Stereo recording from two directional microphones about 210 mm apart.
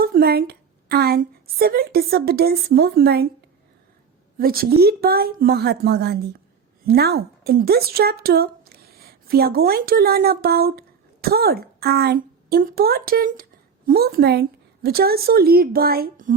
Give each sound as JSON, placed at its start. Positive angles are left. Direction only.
{"t": 0.0, "sound": "a woman's voice", "side_deg": -45}
{"t": 4.4, "sound": "a woman's voice", "side_deg": -45}